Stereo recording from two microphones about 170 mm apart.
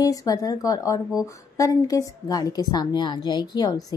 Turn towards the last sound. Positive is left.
turn(degrees=25)  # may be behind; listen again after turning